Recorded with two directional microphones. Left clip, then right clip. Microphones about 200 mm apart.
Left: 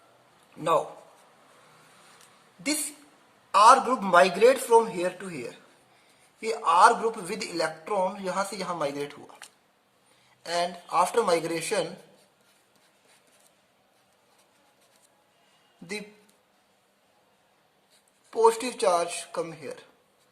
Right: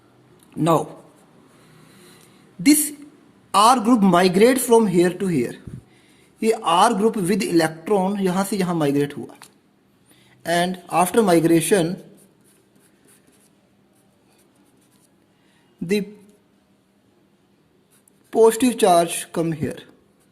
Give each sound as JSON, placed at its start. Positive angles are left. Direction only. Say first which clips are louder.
{"t": 3.5, "sound": "speech", "louder": "right 2 dB", "side_deg": -45}
{"t": 10.4, "sound": "speech", "louder": "right 7 dB", "side_deg": -40}
{"t": 18.3, "sound": "speech", "louder": "right 7 dB", "side_deg": -40}